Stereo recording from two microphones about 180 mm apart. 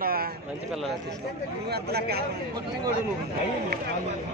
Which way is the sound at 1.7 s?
60° right (ahead or behind).